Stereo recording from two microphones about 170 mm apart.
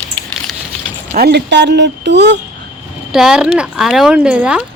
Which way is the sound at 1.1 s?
70° right (ahead or behind).